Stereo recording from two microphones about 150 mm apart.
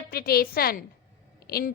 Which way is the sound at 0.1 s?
90° left.